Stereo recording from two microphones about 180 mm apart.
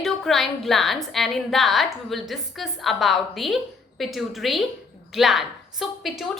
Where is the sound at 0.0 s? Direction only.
Centre (ahead or behind).